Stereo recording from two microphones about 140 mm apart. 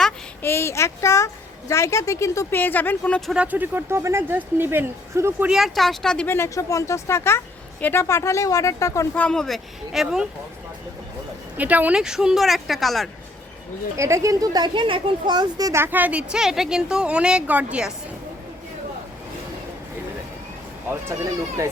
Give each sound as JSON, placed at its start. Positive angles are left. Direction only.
{"t": 0.4, "sound": "a woman's voice", "side_deg": 15}
{"t": 3.4, "sound": "speech", "side_deg": -10}
{"t": 5.5, "sound": "speech", "side_deg": 0}
{"t": 6.2, "sound": "a woman's voice", "side_deg": 15}
{"t": 9.1, "sound": "speech", "side_deg": 5}
{"t": 11.5, "sound": "speech", "side_deg": -10}
{"t": 13.9, "sound": "speech", "side_deg": -20}
{"t": 20.9, "sound": "speech", "side_deg": -20}